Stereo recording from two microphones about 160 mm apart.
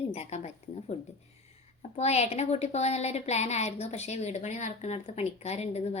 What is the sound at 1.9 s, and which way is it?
A woman's voice, 45° left (ahead or behind).